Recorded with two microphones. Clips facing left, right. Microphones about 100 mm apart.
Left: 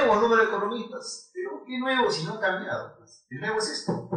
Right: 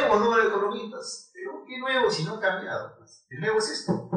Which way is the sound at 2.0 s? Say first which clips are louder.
Right 1 dB; centre (ahead or behind).